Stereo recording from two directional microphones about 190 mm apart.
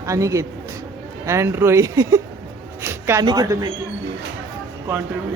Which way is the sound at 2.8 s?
10° right (ahead or behind).